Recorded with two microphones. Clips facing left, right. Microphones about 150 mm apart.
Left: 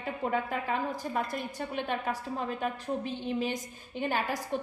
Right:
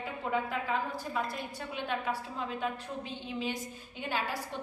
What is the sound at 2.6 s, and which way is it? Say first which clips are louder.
A woman's voice: left 4 dB; 45° left (ahead or behind).